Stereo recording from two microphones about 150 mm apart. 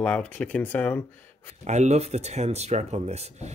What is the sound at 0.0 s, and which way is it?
Speech, 10° left (ahead or behind).